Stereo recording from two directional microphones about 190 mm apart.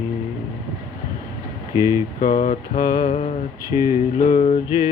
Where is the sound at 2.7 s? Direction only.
30° left (ahead or behind).